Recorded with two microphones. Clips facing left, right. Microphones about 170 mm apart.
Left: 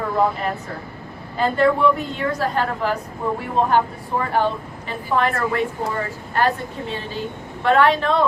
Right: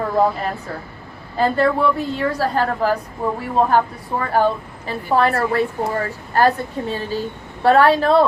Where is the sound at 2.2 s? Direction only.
35° right (ahead or behind).